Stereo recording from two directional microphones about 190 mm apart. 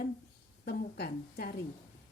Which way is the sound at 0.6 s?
60° left (ahead or behind).